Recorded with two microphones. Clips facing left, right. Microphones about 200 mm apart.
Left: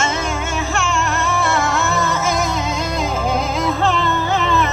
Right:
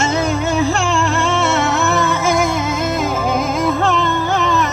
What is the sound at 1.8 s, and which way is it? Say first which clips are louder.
Music: right 3 dB; 60° right (ahead or behind).